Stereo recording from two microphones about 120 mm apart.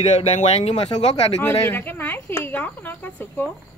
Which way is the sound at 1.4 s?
20° left (ahead or behind).